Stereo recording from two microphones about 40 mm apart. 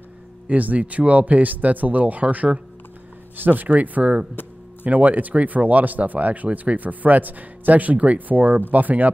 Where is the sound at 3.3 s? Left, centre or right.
Right.